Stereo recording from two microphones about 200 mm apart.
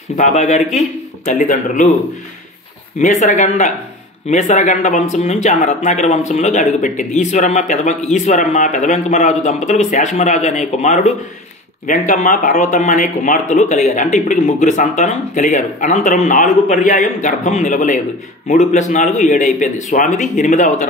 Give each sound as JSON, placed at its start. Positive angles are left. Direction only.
{"t": 0.1, "sound": "speech", "side_deg": 35}
{"t": 3.0, "sound": "speech", "side_deg": 35}